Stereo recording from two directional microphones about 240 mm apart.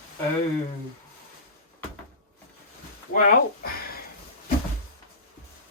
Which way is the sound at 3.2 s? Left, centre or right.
Left.